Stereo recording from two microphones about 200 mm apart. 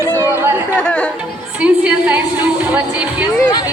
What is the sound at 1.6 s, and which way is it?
Music, 10° right (ahead or behind).